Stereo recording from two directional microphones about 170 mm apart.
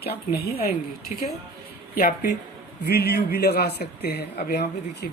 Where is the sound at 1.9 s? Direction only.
65° left (ahead or behind).